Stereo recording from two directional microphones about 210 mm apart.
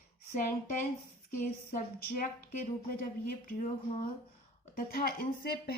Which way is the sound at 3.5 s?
40° left (ahead or behind).